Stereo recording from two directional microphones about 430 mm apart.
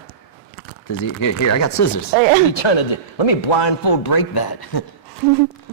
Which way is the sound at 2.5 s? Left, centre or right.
Left.